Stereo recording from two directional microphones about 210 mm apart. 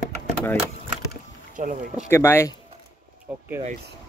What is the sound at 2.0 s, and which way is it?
Speech, 10° left (ahead or behind).